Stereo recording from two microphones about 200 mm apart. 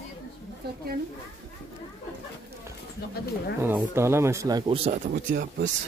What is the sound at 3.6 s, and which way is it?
Speech, 10° right (ahead or behind).